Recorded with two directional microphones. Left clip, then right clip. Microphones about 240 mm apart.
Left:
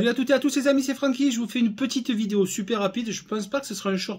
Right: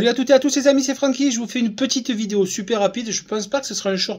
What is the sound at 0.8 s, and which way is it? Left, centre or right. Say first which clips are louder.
A man's voice: right 5 dB; centre.